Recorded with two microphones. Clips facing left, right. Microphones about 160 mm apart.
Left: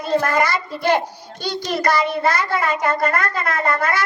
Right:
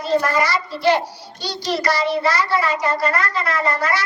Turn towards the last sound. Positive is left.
turn(degrees=55)  # may be behind; listen again after turning